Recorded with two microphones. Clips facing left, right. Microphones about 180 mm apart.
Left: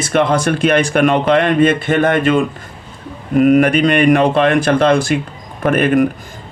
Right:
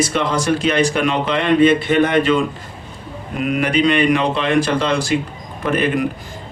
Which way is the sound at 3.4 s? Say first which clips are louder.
Left 6 dB; 50° left (ahead or behind).